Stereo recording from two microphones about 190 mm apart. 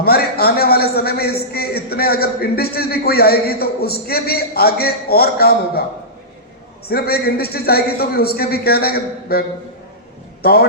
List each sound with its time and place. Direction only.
0.0 s a man's voice: 55° left (ahead or behind)
6.8 s a man's voice: 55° left (ahead or behind)
10.4 s a man's voice: 55° left (ahead or behind)